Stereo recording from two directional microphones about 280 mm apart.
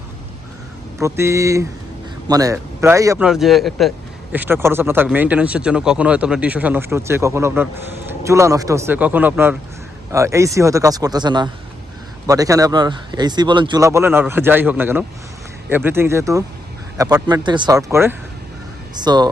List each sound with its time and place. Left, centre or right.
1.0 s a man's voice: centre